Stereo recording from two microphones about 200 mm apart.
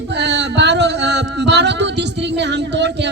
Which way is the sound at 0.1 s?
60° right (ahead or behind).